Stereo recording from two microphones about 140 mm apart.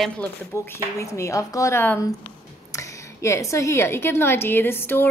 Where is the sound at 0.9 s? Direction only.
20° left (ahead or behind).